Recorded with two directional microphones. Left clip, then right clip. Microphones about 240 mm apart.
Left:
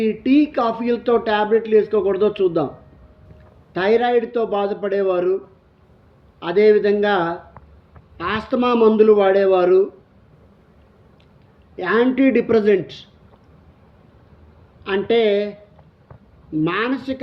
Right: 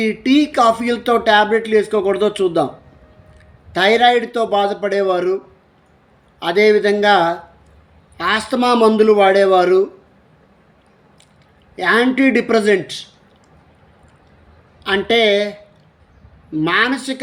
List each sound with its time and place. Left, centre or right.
0.0 s speech: centre
3.7 s speech: centre
6.4 s speech: centre
11.8 s speech: centre
14.8 s speech: centre
16.6 s speech: centre